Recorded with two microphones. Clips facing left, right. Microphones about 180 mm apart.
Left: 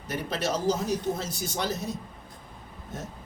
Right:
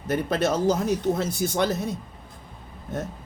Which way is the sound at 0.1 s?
55° right (ahead or behind).